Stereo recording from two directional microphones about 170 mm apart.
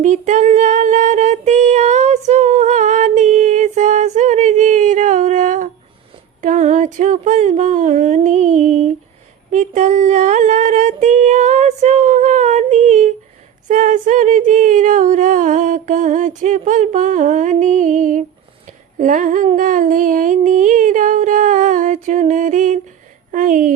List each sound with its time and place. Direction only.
0.0 s female singing: 45° right (ahead or behind)
6.4 s a sound: 45° right (ahead or behind)
23.3 s a woman's voice: 50° right (ahead or behind)